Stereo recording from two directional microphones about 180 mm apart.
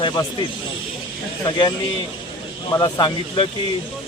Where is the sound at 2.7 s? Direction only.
25° left (ahead or behind).